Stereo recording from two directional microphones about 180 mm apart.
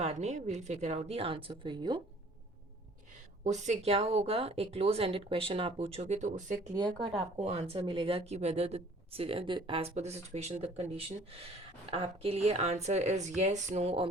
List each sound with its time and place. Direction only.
0.0 s speech: 40° right (ahead or behind)
3.4 s speech: 40° right (ahead or behind)
6.7 s speech: 25° right (ahead or behind)